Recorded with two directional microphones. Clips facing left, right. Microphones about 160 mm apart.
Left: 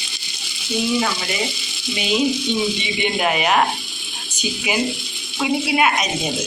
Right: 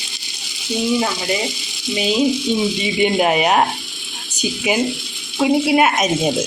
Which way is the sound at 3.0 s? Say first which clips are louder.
Right 6 dB; 40° right (ahead or behind).